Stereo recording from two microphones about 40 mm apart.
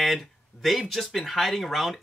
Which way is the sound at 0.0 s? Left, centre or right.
Centre.